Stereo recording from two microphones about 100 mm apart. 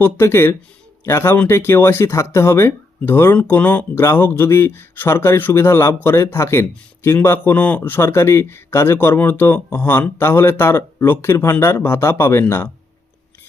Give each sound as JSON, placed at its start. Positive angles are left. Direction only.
{"t": 0.0, "sound": "speech", "side_deg": 25}